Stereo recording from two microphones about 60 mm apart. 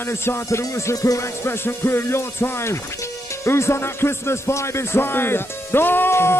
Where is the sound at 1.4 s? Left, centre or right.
Left.